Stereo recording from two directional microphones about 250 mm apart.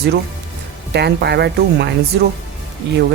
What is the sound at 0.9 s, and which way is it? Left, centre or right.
Speech, right.